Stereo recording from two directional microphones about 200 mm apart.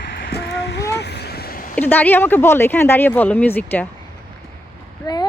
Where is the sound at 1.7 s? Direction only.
10° left (ahead or behind).